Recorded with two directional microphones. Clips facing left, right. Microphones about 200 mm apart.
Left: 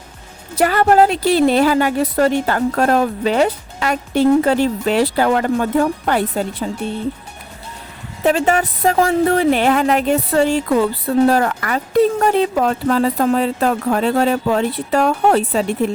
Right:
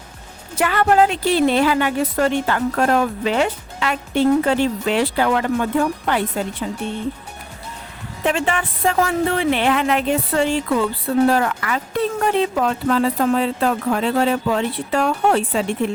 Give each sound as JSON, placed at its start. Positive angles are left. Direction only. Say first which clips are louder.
{"t": 0.5, "sound": "a woman's voice", "louder": "left 3 dB", "side_deg": 40}
{"t": 8.2, "sound": "a woman's voice", "louder": "left 5 dB", "side_deg": 40}